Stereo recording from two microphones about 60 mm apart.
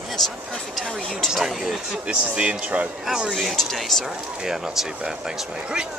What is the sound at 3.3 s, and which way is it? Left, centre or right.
Speech, centre.